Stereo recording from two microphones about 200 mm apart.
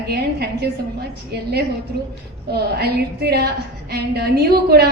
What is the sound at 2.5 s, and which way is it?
A woman's voice, 55° right (ahead or behind).